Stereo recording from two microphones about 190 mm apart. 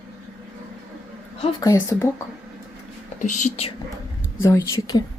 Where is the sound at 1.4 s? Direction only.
20° left (ahead or behind).